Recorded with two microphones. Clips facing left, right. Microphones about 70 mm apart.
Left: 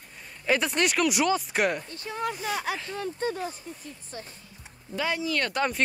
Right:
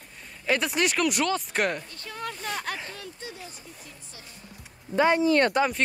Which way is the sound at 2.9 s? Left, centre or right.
Left.